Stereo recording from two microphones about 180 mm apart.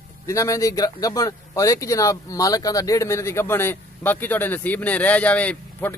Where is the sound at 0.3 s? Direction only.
15° left (ahead or behind).